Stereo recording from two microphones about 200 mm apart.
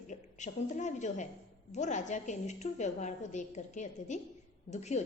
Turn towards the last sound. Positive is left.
turn(degrees=35)  # may be behind; listen again after turning